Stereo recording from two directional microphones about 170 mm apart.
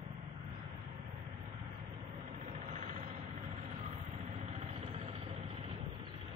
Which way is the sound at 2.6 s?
45° right (ahead or behind).